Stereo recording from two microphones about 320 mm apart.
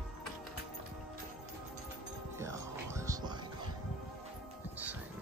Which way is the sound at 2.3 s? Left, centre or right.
Centre.